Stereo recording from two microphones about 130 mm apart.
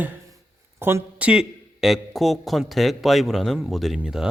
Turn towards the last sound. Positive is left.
turn(degrees=-5)  # may be behind; listen again after turning